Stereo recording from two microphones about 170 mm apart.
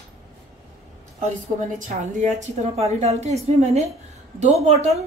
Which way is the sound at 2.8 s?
40° right (ahead or behind).